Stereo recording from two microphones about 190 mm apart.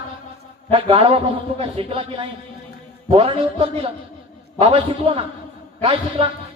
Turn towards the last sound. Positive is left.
turn(degrees=-30)  # may be behind; listen again after turning